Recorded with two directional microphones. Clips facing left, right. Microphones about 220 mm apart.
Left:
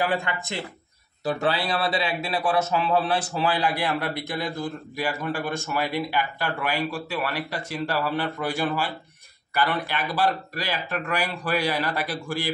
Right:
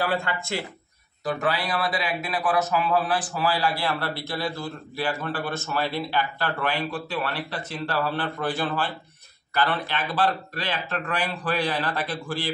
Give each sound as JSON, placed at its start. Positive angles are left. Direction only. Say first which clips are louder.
{"t": 0.0, "sound": "a man's voice", "louder": "even", "side_deg": 15}